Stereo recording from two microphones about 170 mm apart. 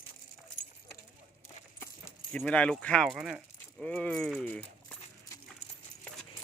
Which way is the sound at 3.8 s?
10° left (ahead or behind).